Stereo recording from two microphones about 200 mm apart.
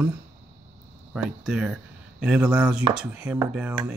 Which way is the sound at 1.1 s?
5° right (ahead or behind).